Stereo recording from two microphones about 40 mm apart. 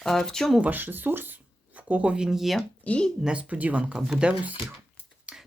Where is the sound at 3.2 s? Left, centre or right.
Right.